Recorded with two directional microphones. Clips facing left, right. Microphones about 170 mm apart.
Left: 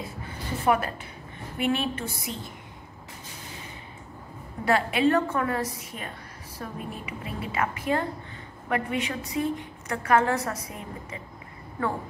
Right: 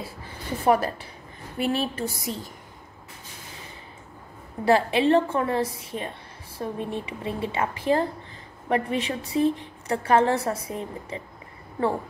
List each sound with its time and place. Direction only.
0.7 s a woman's voice: 35° right (ahead or behind)
4.6 s a woman's voice: 30° right (ahead or behind)